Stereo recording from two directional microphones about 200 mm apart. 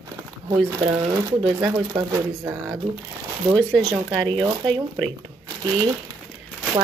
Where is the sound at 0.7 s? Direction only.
20° right (ahead or behind).